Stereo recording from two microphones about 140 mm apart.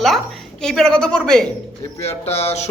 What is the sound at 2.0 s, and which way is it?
Speech, 50° left (ahead or behind).